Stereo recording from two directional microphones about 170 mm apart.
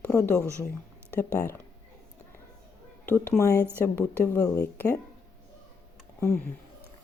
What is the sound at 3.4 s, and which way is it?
A woman's voice, 15° left (ahead or behind).